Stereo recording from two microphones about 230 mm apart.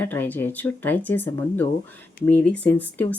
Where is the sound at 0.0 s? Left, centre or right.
Centre.